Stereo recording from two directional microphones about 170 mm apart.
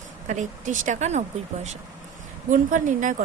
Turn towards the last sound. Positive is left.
turn(degrees=-50)  # may be behind; listen again after turning